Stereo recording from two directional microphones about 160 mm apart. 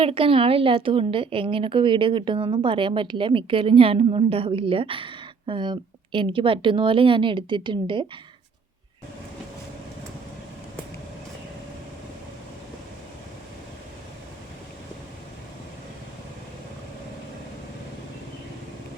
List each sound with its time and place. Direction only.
0.0 s a woman's voice: 35° right (ahead or behind)